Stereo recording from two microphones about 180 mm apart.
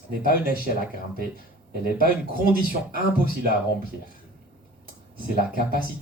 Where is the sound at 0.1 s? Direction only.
55° right (ahead or behind).